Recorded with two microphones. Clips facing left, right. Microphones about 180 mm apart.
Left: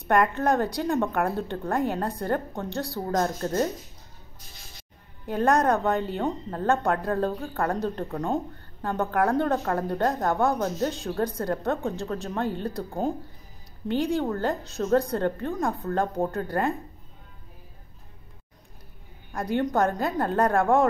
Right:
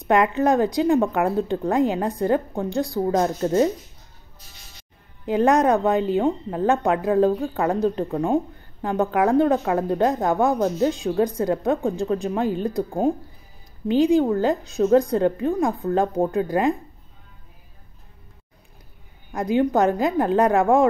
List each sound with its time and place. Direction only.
0.1 s speech: 15° right (ahead or behind)
5.2 s speech: 15° right (ahead or behind)
14.2 s speech: 15° right (ahead or behind)
19.3 s speech: 10° right (ahead or behind)